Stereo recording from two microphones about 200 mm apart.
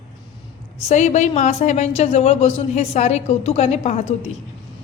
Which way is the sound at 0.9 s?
35° left (ahead or behind).